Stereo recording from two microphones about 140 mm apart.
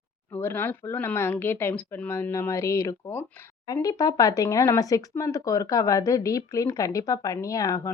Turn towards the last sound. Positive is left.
turn(degrees=25)  # may be behind; listen again after turning